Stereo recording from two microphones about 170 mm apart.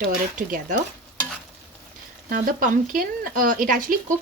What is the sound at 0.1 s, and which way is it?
Speech, 55° right (ahead or behind).